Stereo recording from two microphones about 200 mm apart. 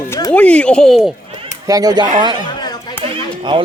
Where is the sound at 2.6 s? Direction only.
20° left (ahead or behind).